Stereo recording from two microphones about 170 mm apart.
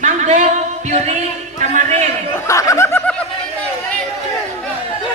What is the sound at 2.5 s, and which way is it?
Snicker, 20° left (ahead or behind).